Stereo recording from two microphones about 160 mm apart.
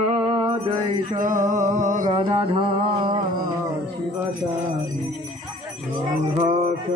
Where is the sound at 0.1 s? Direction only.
30° right (ahead or behind).